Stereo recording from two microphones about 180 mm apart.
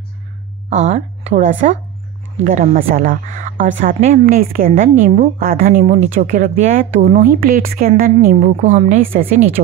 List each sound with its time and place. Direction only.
0.7 s a woman's voice: 40° right (ahead or behind)